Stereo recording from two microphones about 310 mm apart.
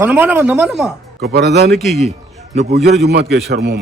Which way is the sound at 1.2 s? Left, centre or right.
Right.